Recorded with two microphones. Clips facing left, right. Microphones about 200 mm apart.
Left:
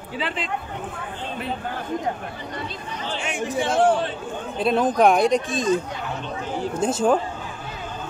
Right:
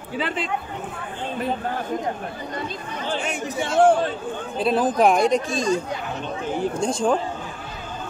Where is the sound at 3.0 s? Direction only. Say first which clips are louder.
Right 1 dB; 45° right (ahead or behind).